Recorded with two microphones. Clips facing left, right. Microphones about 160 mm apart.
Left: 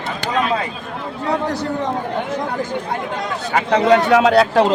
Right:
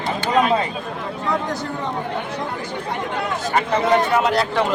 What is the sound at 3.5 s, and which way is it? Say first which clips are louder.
Speech: left 4 dB; 80° left.